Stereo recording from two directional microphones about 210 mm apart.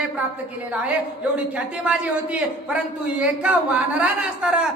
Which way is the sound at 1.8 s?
5° right (ahead or behind).